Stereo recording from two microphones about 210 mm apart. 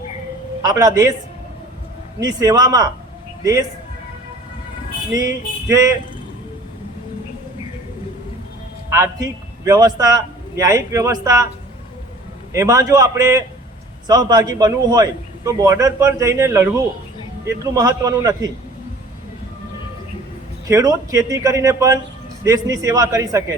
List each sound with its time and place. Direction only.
0.6 s a man's voice: 15° right (ahead or behind)
2.2 s a man's voice: 15° right (ahead or behind)
5.1 s a man's voice: 15° right (ahead or behind)
8.9 s a man's voice: 15° right (ahead or behind)
12.5 s a man's voice: 15° right (ahead or behind)
20.7 s a man's voice: 15° right (ahead or behind)